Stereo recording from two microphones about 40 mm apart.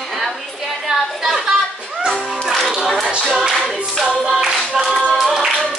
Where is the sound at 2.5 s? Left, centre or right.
Centre.